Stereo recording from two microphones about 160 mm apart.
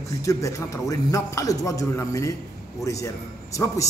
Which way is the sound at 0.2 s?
20° left (ahead or behind).